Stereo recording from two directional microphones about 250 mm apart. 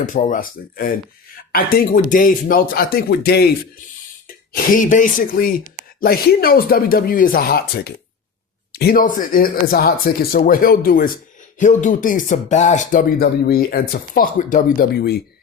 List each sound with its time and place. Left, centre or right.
0.0 s speech: left
4.5 s speech: left